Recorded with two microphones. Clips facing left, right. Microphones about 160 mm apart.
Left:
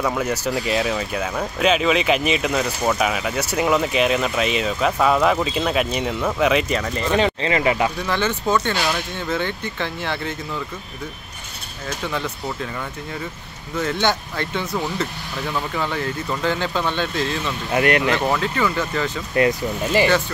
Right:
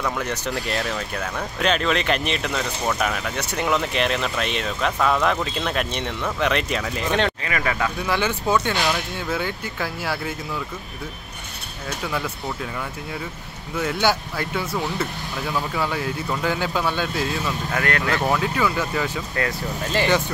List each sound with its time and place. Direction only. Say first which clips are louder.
0.0 s speech: left 4 dB; 5° left (ahead or behind)
7.4 s speech: left 5 dB; 20° left (ahead or behind)
8.1 s speech: right 2 dB; 10° right (ahead or behind)
12.0 s speech: left 1 dB; 5° right (ahead or behind)
13.7 s speech: left 1 dB; 5° right (ahead or behind)
17.6 s speech: left 7 dB; 20° left (ahead or behind)
18.2 s speech: left 1 dB; 5° right (ahead or behind)
19.3 s speech: left 12 dB; 15° left (ahead or behind)